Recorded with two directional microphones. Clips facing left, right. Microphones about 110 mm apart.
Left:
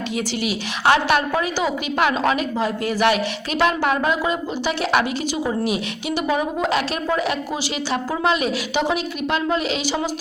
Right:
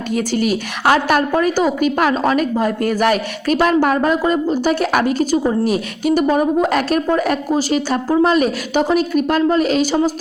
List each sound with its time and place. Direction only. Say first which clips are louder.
0.1 s speech: right 9 dB; 45° right (ahead or behind)